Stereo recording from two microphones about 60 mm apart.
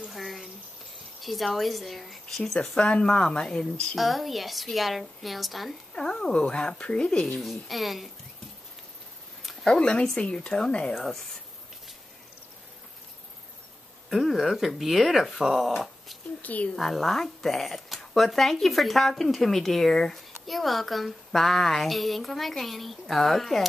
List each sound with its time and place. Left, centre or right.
0.1 s a sound: centre
1.2 s speech: centre
3.9 s speech: centre
5.9 s speech: centre
7.4 s speech: centre
9.4 s a sound: centre
9.7 s speech: centre
11.0 s speech: centre
14.1 s speech: centre
16.4 s a woman's voice: left
16.7 s speech: centre